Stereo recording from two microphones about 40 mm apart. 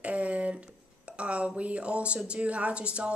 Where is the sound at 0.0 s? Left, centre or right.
Right.